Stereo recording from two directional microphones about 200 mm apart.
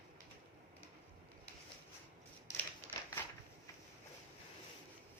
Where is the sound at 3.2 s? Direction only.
10° left (ahead or behind).